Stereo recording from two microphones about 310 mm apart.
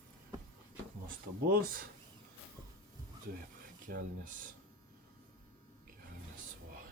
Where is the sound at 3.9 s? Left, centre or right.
Right.